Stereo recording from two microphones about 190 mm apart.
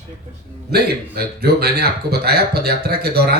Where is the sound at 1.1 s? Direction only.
55° right (ahead or behind).